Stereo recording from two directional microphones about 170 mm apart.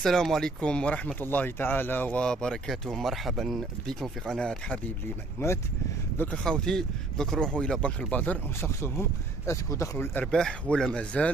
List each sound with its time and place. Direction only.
0.0 s speech: centre (ahead or behind)